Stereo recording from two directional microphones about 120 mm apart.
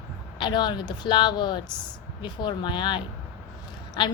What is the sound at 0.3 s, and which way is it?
A woman's voice, 40° left (ahead or behind).